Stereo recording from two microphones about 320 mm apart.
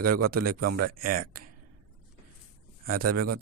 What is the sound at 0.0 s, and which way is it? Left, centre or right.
Speech, right.